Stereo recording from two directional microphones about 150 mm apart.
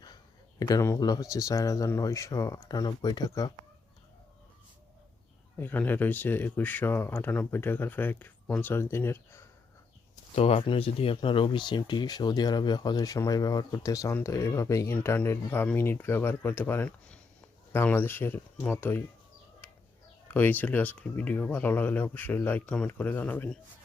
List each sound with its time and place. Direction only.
0.7 s speech: 20° left (ahead or behind)
5.5 s speech: 15° left (ahead or behind)
10.3 s speech: 40° left (ahead or behind); by 19.0 s 15° left (ahead or behind)
20.2 s speech: 10° left (ahead or behind)